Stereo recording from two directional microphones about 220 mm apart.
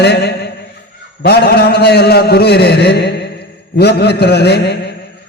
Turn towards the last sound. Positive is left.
turn(degrees=50)  # may be behind; listen again after turning